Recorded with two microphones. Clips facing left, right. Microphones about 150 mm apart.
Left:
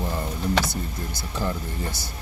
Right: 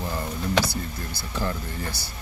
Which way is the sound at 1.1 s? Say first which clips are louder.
Even; 20° left (ahead or behind).